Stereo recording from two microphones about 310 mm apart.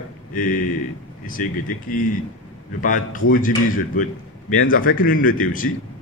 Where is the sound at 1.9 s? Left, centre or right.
Left.